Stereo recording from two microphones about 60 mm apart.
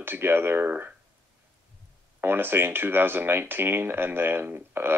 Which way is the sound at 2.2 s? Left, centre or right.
Right.